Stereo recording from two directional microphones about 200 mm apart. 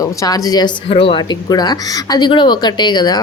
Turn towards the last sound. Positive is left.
turn(degrees=20)  # may be behind; listen again after turning